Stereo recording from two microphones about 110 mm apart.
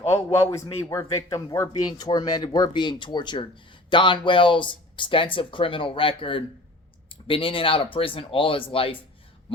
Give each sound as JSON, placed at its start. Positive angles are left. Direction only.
{"t": 0.0, "sound": "a man's voice", "side_deg": 25}
{"t": 1.8, "sound": "speech", "side_deg": 40}